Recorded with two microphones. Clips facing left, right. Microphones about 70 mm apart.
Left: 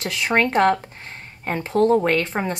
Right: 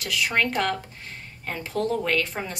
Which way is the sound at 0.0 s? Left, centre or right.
Left.